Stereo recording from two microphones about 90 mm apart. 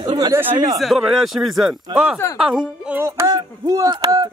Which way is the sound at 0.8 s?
Centre (ahead or behind).